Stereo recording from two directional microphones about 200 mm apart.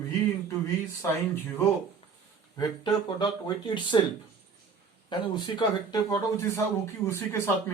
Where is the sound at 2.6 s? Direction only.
20° left (ahead or behind).